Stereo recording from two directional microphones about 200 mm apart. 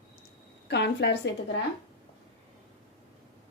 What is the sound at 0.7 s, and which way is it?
Speech, 55° left (ahead or behind).